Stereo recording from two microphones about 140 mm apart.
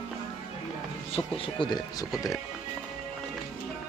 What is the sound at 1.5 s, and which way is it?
Speech, 30° left (ahead or behind).